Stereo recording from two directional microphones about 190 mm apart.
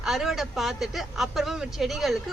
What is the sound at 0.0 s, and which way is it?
Speech, centre (ahead or behind).